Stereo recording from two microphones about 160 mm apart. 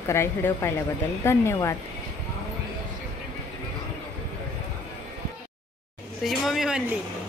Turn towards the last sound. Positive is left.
turn(degrees=-5)  # may be behind; listen again after turning